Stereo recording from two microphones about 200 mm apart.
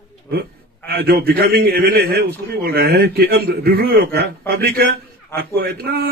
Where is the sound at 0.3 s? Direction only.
50° right (ahead or behind).